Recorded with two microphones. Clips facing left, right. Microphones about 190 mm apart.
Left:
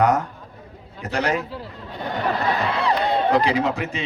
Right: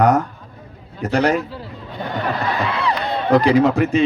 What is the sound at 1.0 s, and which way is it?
Speech, 35° right (ahead or behind).